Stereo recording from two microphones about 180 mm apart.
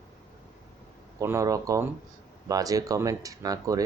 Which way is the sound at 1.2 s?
15° right (ahead or behind).